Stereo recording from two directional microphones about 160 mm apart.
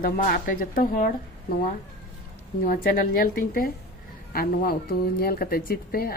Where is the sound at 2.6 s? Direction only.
65° left (ahead or behind).